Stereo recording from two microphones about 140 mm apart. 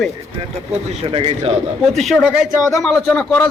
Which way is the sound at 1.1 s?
40° right (ahead or behind).